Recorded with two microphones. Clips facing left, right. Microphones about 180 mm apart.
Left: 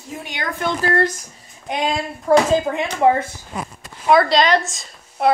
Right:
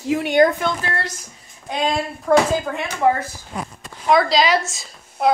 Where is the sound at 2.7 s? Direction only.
20° left (ahead or behind).